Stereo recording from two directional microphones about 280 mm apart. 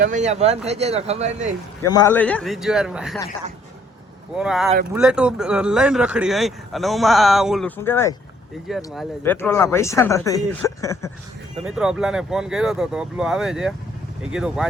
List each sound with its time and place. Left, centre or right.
0.0 s speech: right
1.8 s speech: centre
4.4 s speech: centre
11.6 s speech: centre